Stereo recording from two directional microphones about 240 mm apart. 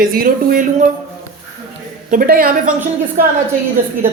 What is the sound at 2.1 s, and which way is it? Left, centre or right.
Speech, right.